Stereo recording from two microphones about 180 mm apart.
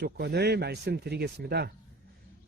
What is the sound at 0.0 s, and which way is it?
Speech, 65° right (ahead or behind).